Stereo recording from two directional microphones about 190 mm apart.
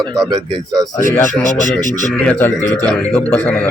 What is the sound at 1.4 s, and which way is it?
Speech, 40° right (ahead or behind).